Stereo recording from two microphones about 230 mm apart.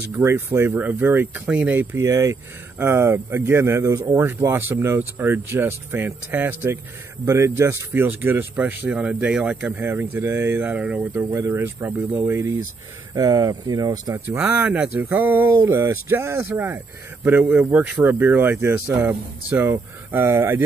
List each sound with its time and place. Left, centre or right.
0.2 s speech: centre